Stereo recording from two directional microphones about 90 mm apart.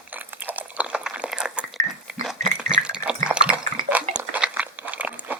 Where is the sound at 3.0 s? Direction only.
10° right (ahead or behind).